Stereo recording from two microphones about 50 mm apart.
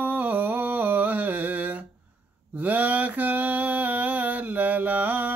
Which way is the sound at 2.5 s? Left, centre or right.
Right.